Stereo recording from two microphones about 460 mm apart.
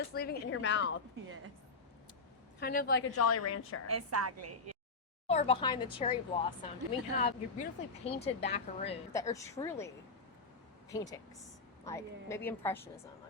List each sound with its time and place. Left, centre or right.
0.1 s a woman's voice: centre
2.6 s a woman's voice: centre
3.9 s a woman's voice: right
5.3 s a woman's voice: centre